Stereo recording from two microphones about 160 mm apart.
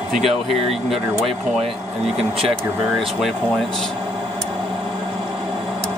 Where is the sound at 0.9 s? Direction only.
40° right (ahead or behind).